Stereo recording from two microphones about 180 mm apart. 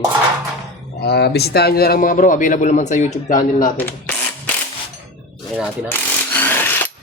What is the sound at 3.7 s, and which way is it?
Speech, 10° left (ahead or behind).